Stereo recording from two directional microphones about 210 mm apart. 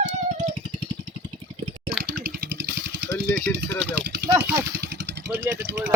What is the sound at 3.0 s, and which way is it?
Speech, 55° right (ahead or behind).